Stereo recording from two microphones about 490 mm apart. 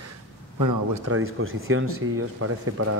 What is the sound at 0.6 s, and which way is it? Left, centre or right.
Speech, right.